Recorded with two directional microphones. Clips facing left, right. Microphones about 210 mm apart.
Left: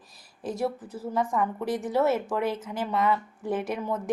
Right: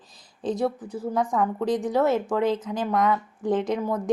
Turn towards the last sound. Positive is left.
turn(degrees=-15)  # may be behind; listen again after turning